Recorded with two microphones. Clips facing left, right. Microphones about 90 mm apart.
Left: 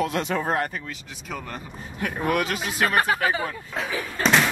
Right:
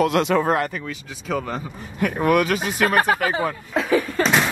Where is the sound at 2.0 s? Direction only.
65° right (ahead or behind).